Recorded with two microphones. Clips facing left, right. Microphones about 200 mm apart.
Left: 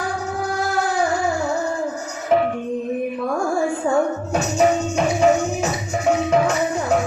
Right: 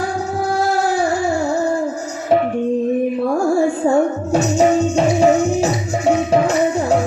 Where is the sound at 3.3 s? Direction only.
25° right (ahead or behind).